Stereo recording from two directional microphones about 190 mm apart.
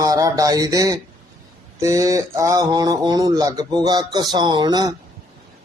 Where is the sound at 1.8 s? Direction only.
15° right (ahead or behind).